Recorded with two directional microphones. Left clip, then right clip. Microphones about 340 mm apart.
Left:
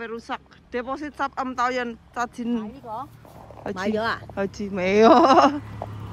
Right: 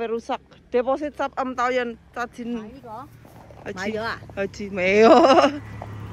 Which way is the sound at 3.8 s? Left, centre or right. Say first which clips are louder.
Left 3 dB; left.